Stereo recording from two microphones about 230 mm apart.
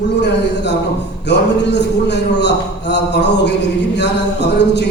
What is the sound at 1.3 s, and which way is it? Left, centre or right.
A man's voice, left.